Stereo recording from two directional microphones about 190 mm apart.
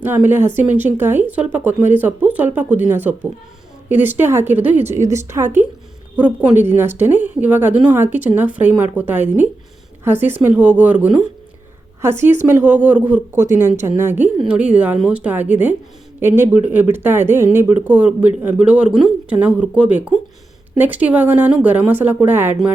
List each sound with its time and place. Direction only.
0.0 s speech: 10° right (ahead or behind)